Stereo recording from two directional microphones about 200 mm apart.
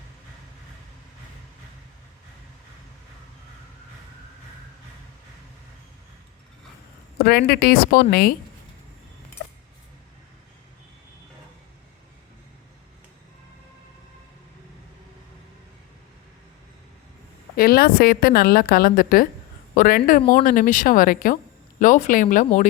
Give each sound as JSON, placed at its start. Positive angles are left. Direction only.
{"t": 7.2, "sound": "a woman's voice", "side_deg": 50}
{"t": 17.6, "sound": "a woman's voice", "side_deg": 50}